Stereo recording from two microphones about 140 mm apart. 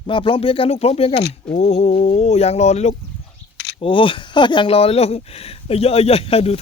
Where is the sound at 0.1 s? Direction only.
40° left (ahead or behind); by 2.9 s 55° left (ahead or behind).